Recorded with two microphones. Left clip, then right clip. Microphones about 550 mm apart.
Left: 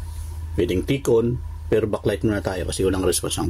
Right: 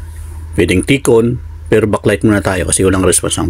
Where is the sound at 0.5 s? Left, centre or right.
Left.